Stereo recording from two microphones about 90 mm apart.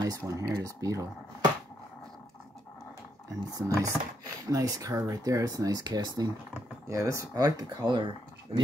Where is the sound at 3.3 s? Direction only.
40° right (ahead or behind).